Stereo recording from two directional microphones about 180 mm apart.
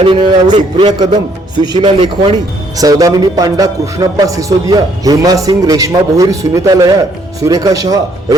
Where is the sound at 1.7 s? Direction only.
30° right (ahead or behind).